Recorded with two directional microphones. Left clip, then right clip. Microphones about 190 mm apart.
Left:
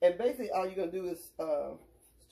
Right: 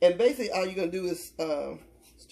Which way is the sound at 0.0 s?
30° right (ahead or behind).